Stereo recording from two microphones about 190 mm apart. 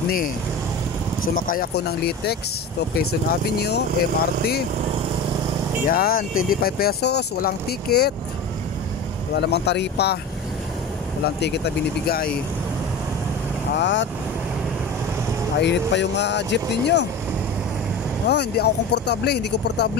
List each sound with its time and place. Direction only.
1.3 s speech: 50° left (ahead or behind)
5.9 s speech: 50° left (ahead or behind)
9.3 s speech: 60° left (ahead or behind)
11.4 s speech: 60° left (ahead or behind)
13.7 s speech: 70° left (ahead or behind)
15.6 s speech: 70° left (ahead or behind)
18.3 s speech: 60° left (ahead or behind)